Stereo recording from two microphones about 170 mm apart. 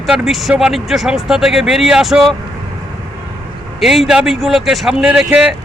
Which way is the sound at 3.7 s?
Centre (ahead or behind).